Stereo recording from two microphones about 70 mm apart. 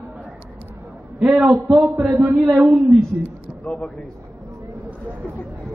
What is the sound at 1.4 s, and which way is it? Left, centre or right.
A man's voice, centre.